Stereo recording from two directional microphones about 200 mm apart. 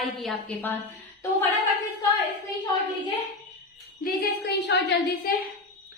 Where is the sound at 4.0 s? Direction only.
50° left (ahead or behind).